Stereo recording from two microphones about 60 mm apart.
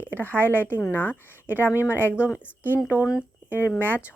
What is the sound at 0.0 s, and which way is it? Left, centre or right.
Speech, left.